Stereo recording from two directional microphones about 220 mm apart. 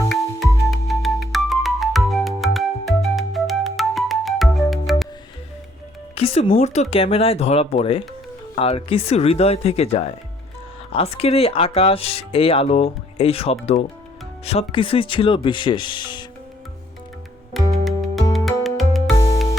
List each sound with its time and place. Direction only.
0.1 s music: centre (ahead or behind)
6.1 s speech: 25° left (ahead or behind)
17.8 s music: centre (ahead or behind)